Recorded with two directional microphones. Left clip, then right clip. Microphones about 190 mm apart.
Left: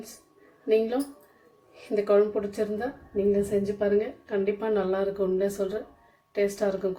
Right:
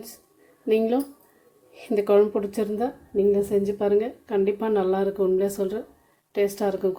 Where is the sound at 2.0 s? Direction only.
50° right (ahead or behind).